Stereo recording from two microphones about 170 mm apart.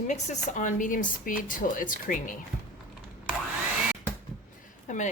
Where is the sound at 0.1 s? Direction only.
45° left (ahead or behind).